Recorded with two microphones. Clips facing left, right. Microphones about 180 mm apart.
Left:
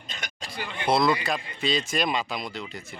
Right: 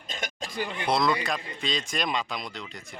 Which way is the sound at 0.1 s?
45° right (ahead or behind).